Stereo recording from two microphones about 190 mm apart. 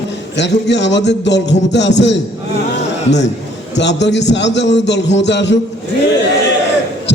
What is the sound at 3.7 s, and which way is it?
A man's voice, 65° left (ahead or behind).